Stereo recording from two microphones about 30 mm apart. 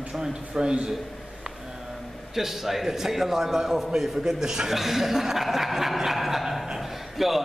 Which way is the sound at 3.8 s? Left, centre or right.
Centre.